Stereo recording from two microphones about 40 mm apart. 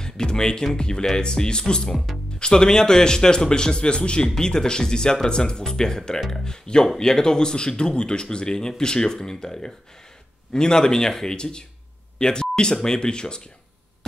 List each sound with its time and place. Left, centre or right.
0.0 s a man's voice: centre